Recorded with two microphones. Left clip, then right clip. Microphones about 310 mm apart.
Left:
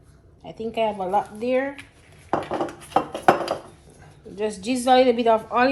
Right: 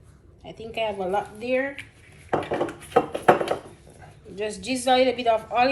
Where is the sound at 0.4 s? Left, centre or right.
Left.